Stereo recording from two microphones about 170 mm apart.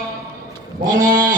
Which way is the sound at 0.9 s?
50° right (ahead or behind).